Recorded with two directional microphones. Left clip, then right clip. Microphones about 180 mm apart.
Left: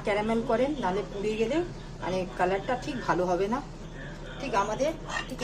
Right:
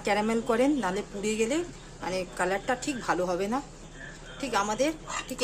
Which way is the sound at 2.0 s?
30° right (ahead or behind).